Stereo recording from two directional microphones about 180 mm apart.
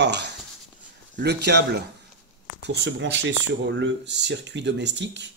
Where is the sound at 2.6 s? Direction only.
80° right.